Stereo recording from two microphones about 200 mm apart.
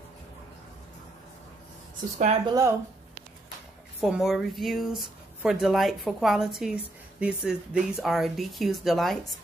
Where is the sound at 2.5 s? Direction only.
15° right (ahead or behind).